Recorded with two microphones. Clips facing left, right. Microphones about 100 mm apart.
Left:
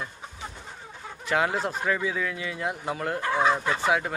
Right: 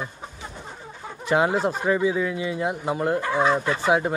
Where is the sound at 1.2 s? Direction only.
20° right (ahead or behind).